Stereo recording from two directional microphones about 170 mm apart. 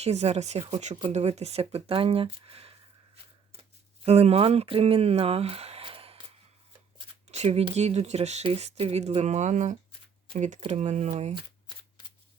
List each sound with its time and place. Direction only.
0.0 s speech: 40° right (ahead or behind)
7.3 s speech: 40° right (ahead or behind)